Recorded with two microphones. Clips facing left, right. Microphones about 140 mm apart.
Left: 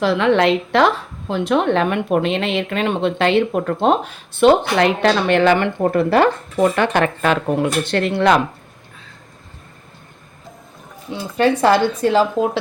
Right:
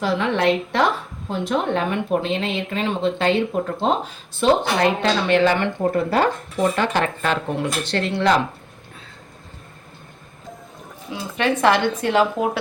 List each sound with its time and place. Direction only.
0.0 s a woman's voice: 85° left; by 8.4 s 55° left (ahead or behind)
11.1 s speech: 35° left (ahead or behind)